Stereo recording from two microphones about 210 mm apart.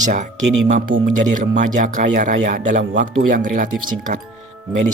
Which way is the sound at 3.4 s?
40° right (ahead or behind).